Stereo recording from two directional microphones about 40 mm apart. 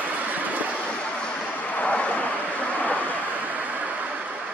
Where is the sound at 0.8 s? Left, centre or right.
Left.